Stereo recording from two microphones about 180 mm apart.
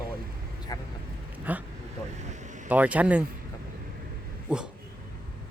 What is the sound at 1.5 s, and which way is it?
Speech, 10° right (ahead or behind).